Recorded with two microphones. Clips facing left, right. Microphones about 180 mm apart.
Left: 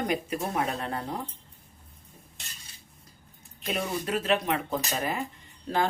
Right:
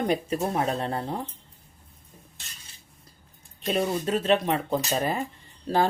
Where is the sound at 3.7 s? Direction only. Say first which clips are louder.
Right 4 dB; 30° right (ahead or behind).